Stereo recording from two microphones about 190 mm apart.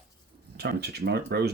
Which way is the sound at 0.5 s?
60° right (ahead or behind).